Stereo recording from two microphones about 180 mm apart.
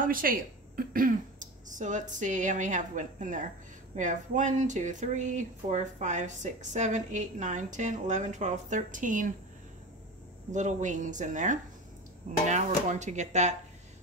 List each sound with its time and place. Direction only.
0.0 s speech: 50° right (ahead or behind)
10.5 s speech: 45° right (ahead or behind)